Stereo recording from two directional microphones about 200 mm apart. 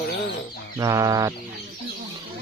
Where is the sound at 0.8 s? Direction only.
15° right (ahead or behind).